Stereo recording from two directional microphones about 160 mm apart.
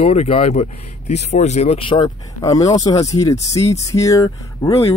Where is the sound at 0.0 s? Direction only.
40° left (ahead or behind); by 4.8 s 20° left (ahead or behind).